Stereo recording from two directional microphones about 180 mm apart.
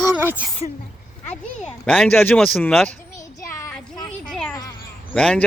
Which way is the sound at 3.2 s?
15° left (ahead or behind).